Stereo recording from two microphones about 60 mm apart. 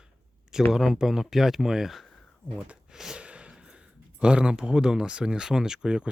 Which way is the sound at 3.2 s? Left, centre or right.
Centre.